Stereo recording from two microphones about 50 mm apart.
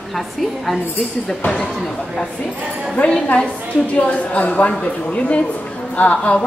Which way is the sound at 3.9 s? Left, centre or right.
Left.